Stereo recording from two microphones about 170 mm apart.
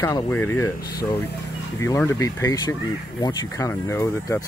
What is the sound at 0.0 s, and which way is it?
Speech, 15° left (ahead or behind).